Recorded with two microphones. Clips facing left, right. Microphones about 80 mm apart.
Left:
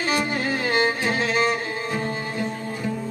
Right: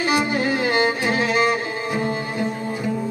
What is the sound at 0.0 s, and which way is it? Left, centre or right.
Music, centre.